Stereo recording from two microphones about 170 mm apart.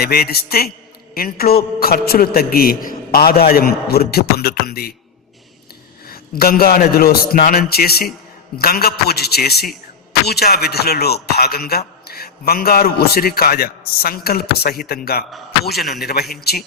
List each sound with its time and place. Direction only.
0.0 s a man's voice: 65° left (ahead or behind)
6.1 s a man's voice: 60° left (ahead or behind)